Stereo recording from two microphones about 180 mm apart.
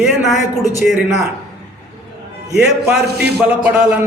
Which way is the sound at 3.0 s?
65° right (ahead or behind).